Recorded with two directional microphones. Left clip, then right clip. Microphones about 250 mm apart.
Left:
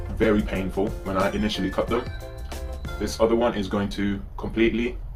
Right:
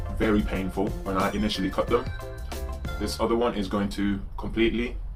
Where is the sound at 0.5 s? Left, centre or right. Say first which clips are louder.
Left 2 dB; centre.